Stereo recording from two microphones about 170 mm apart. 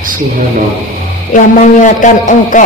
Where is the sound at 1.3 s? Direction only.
50° left (ahead or behind).